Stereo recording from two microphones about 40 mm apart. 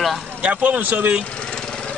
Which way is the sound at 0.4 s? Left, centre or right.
Right.